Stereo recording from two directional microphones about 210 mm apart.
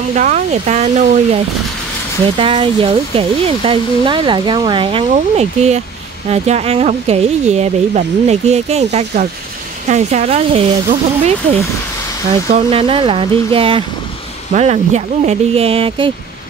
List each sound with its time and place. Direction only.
0.1 s speech: 35° right (ahead or behind)
12.4 s speech: 30° right (ahead or behind)